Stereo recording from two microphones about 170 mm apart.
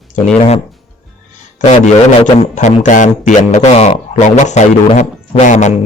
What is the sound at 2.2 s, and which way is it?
Speech, 45° left (ahead or behind).